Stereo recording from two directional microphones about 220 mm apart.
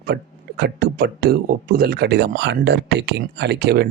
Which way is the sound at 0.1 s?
45° right (ahead or behind).